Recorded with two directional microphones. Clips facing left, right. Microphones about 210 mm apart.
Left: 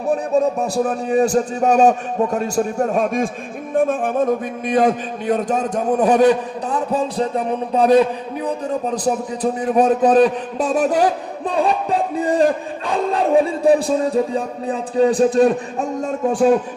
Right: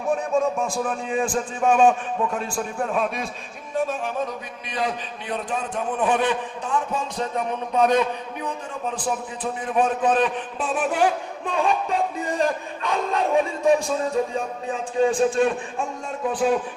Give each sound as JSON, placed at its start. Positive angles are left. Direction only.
{"t": 0.0, "sound": "a man's voice", "side_deg": 35}